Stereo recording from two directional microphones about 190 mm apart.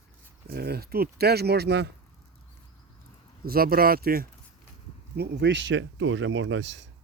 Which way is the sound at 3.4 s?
50° right (ahead or behind).